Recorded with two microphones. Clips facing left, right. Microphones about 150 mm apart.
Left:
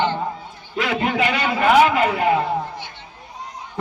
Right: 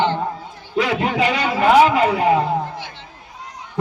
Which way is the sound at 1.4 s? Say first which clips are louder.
Right 2 dB; 20° right (ahead or behind).